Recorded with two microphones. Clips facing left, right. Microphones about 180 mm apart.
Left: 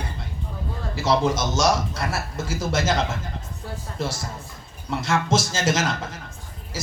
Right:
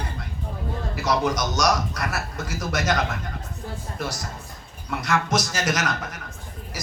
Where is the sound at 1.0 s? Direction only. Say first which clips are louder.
Left 2 dB; 25° left (ahead or behind).